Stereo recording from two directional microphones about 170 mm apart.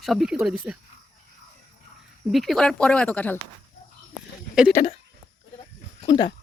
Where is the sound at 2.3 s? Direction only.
Centre (ahead or behind).